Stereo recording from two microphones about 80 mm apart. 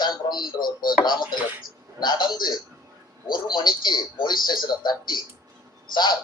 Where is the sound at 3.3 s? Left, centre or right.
Left.